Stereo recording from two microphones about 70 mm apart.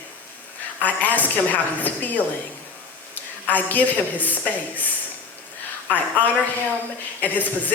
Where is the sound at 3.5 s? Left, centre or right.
Left.